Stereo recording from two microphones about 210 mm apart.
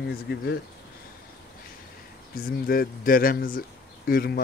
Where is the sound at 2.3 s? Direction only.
45° left (ahead or behind).